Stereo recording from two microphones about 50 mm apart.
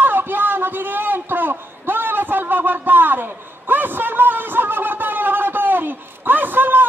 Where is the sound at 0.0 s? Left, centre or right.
Right.